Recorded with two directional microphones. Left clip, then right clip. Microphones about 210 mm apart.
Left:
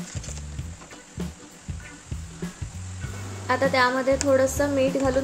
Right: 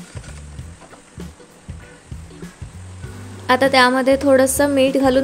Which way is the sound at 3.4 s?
50° right (ahead or behind).